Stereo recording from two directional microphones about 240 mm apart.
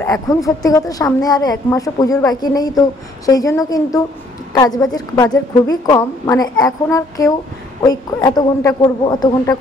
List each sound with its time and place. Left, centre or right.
0.0 s a woman's voice: centre